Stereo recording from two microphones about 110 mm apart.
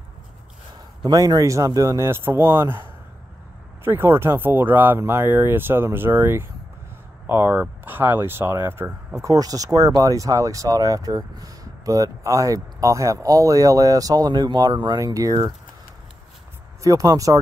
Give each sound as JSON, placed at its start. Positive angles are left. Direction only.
{"t": 1.0, "sound": "speech", "side_deg": -40}
{"t": 3.8, "sound": "speech", "side_deg": -20}
{"t": 16.8, "sound": "speech", "side_deg": -30}